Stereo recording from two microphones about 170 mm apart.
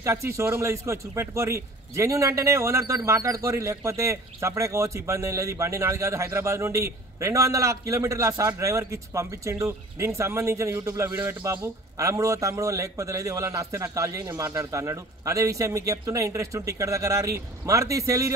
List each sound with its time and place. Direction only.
0.0 s speech: 15° right (ahead or behind)